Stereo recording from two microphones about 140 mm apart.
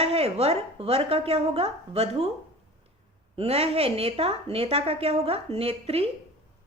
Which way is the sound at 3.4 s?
45° right (ahead or behind).